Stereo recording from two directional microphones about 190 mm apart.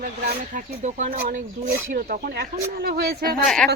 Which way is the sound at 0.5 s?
40° right (ahead or behind).